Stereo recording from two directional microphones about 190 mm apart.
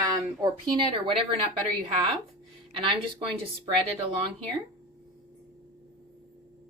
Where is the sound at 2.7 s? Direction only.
25° right (ahead or behind).